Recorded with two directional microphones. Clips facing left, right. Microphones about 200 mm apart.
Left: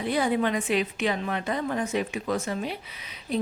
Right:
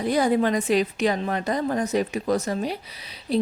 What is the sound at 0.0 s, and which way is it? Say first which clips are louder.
A woman's voice: right 4 dB; 40° right (ahead or behind).